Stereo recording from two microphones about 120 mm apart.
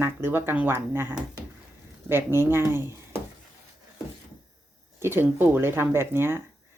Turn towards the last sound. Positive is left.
turn(degrees=-20)  # may be behind; listen again after turning